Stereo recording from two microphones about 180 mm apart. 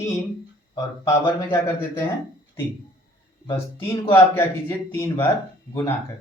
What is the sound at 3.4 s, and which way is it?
Speech, 25° left (ahead or behind).